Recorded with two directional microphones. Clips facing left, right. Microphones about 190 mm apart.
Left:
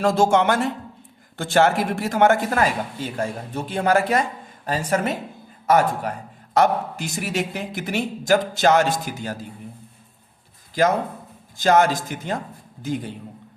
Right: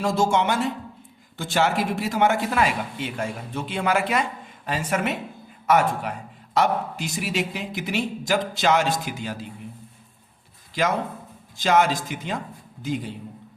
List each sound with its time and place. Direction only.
0.0 s speech: 55° left (ahead or behind)
11.5 s speech: 45° left (ahead or behind)